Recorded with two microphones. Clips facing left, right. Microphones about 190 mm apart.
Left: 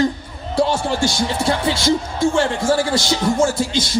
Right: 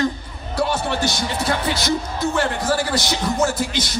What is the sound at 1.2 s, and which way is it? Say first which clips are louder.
Speech: left 3 dB; 25° left (ahead or behind).